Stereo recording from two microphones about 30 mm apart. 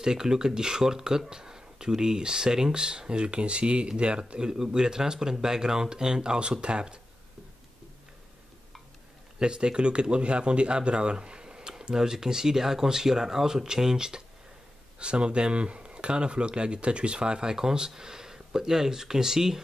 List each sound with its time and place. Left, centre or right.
0.0 s speech: right
9.4 s speech: right
15.0 s speech: right; by 19.6 s centre